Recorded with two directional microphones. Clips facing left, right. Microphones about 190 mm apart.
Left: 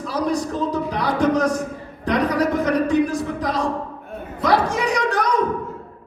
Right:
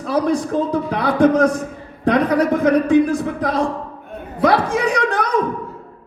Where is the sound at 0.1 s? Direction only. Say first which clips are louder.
Right 5 dB; 55° right (ahead or behind).